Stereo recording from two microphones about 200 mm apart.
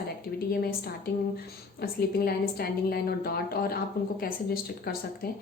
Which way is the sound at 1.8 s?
50° left (ahead or behind).